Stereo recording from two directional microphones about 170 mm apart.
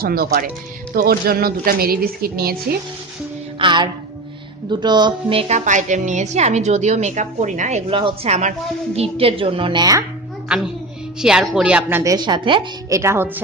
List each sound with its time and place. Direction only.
0.0 s a woman's voice: 60° right (ahead or behind)
3.5 s music: 30° right (ahead or behind)
4.6 s a woman's voice: 25° right (ahead or behind)
5.7 s a woman's voice: 45° right (ahead or behind)
7.9 s a woman's voice: 30° right (ahead or behind)
11.1 s speech: 5° right (ahead or behind)
12.0 s a woman's voice: 25° right (ahead or behind)
13.0 s a woman's voice: 15° right (ahead or behind)